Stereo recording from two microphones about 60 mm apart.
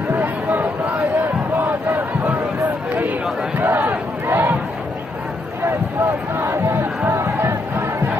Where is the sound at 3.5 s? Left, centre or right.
Right.